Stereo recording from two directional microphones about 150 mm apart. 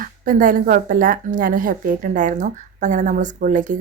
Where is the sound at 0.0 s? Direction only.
65° right (ahead or behind).